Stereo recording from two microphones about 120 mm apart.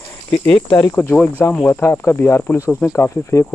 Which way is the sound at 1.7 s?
20° left (ahead or behind).